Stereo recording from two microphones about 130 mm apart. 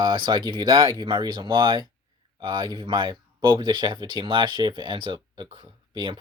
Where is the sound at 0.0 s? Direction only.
30° right (ahead or behind).